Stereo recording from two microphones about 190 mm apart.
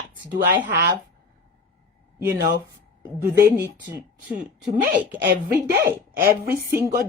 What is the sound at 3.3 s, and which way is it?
Speech, 15° right (ahead or behind).